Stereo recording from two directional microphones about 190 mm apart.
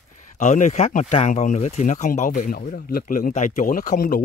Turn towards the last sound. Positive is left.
turn(degrees=45)  # may be behind; listen again after turning